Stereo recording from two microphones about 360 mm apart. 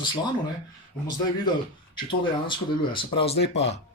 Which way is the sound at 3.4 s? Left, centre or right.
Left.